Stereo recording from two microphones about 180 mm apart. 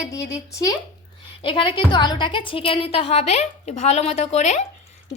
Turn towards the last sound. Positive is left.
turn(degrees=40)  # may be behind; listen again after turning